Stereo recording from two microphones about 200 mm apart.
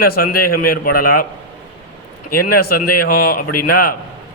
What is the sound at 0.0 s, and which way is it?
Speech, 45° left (ahead or behind).